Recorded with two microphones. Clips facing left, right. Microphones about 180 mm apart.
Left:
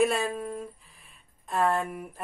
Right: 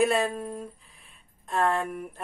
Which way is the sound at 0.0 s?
Centre (ahead or behind).